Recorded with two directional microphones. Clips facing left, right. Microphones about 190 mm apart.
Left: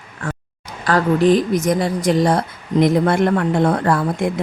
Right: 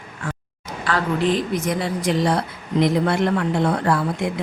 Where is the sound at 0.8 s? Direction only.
40° left (ahead or behind).